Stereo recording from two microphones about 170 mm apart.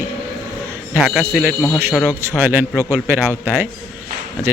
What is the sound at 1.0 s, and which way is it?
A man's voice, centre (ahead or behind).